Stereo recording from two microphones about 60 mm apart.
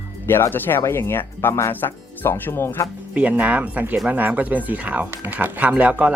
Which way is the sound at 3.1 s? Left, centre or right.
Right.